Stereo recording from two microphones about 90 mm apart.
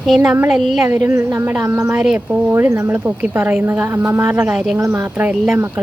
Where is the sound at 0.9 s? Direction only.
35° right (ahead or behind).